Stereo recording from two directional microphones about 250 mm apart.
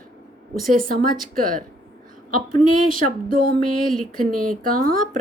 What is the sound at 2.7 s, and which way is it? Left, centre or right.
Speech, right.